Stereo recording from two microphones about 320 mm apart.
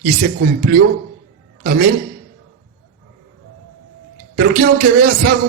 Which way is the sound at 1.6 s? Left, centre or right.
Right.